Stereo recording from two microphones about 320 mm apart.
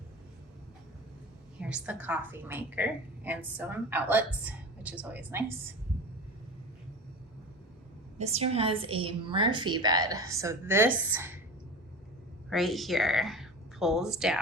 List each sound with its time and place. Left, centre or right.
1.6 s a woman's voice: centre
8.2 s a woman's voice: centre
12.5 s speech: centre